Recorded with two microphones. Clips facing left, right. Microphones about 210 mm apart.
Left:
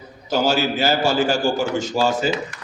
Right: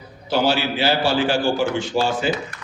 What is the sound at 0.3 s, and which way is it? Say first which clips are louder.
A man's voice: even; 45° left (ahead or behind).